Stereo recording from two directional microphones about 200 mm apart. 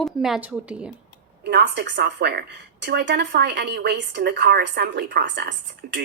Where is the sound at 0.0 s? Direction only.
Centre (ahead or behind).